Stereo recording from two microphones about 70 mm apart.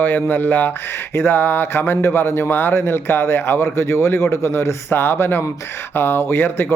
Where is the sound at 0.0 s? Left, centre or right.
Left.